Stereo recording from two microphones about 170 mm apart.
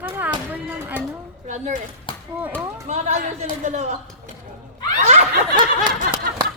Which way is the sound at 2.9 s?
45° right (ahead or behind).